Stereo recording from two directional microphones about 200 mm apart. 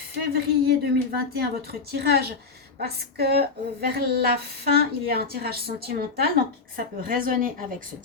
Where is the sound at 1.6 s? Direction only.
50° right (ahead or behind).